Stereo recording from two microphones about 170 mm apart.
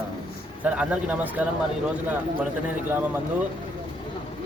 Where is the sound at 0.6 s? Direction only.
5° right (ahead or behind).